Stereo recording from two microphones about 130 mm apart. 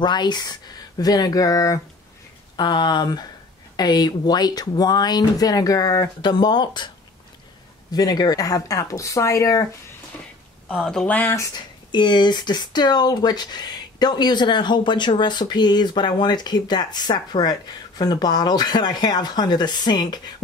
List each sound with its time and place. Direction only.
0.0 s speech: 35° left (ahead or behind)
7.9 s speech: 30° left (ahead or behind)
10.7 s speech: 5° left (ahead or behind); by 11.6 s 25° left (ahead or behind)
11.9 s speech: 35° left (ahead or behind)